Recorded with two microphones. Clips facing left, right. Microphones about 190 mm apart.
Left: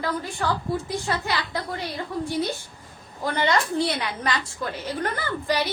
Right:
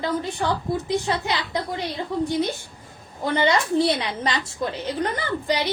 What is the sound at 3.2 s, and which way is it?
A woman's voice, 20° right (ahead or behind).